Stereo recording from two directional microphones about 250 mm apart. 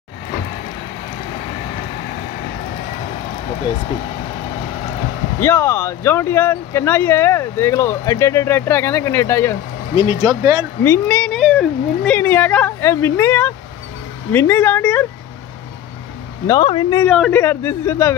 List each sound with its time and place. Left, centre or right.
5.4 s speech: centre
10.0 s speech: centre
10.8 s speech: centre
16.4 s speech: centre
17.0 s speech: centre